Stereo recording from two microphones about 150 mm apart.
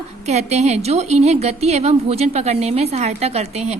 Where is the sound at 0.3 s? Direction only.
45° right (ahead or behind).